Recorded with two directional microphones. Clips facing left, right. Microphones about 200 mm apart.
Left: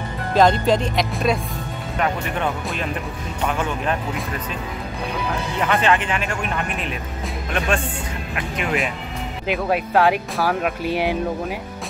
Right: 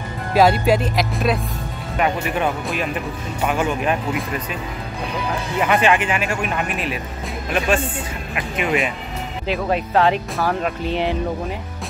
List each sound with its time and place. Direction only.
0.3 s speech: 10° right (ahead or behind)
5.6 s speech: 10° right (ahead or behind); by 11.1 s 5° left (ahead or behind)